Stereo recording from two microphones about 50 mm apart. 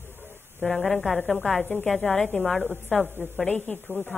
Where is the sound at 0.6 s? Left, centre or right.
Centre.